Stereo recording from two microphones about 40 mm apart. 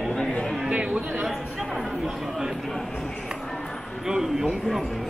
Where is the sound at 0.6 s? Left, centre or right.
Right.